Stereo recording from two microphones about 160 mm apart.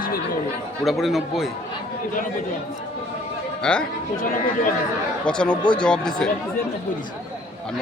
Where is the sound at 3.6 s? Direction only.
5° left (ahead or behind).